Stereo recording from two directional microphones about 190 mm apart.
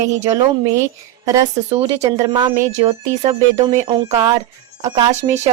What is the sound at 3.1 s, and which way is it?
Speech, 40° right (ahead or behind).